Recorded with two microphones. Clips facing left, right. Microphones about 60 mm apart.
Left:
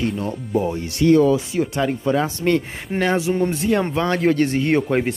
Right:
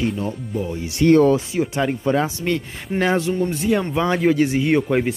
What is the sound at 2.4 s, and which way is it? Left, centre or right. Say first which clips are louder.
Speech: left 4 dB; centre.